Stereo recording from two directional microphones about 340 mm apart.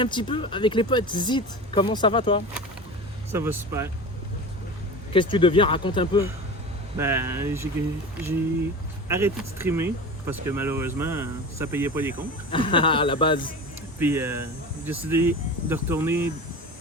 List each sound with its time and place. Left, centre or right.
0.0 s speech: centre
3.3 s speech: centre
5.1 s speech: centre
6.9 s speech: centre
9.0 s speech: centre
12.5 s speech: centre
14.0 s speech: centre